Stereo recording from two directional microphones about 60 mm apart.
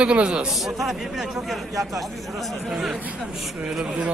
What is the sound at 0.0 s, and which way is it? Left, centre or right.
Speech, centre.